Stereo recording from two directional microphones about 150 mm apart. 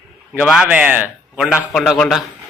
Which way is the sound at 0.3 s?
5° right (ahead or behind).